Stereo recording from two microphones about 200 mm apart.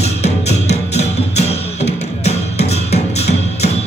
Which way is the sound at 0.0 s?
35° left (ahead or behind).